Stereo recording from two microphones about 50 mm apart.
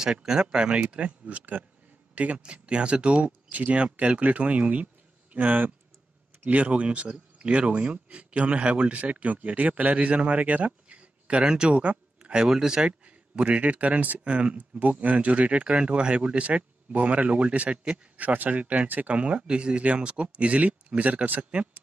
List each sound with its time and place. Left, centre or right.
0.0 s speech: centre
0.8 s speech: right
13.0 s speech: right